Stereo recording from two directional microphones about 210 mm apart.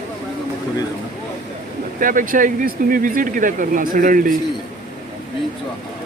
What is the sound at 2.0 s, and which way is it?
Speech, 40° right (ahead or behind).